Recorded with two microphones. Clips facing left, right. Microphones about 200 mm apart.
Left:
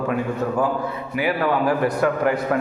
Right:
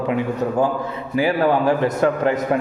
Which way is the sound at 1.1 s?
30° right (ahead or behind).